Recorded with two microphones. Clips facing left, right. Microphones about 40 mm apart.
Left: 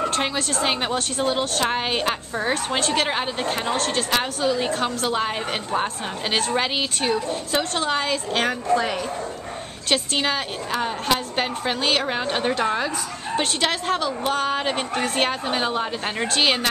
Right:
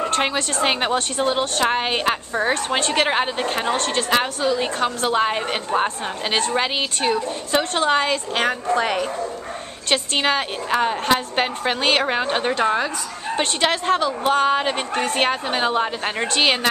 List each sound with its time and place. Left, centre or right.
0.2 s a woman's voice: centre
8.7 s a woman's voice: right
10.1 s a woman's voice: centre